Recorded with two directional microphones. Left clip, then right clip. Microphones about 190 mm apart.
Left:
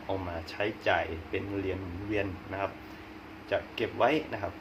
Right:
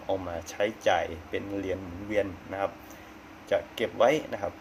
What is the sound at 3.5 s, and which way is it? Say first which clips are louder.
Speech: right 3 dB; 50° right (ahead or behind).